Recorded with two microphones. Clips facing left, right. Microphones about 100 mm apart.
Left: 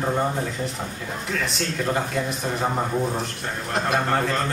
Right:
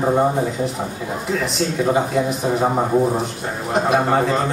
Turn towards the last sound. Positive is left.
turn(degrees=-10)  # may be behind; listen again after turning